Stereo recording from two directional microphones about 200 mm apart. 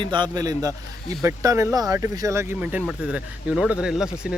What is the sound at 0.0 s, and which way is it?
A man's voice, 25° right (ahead or behind).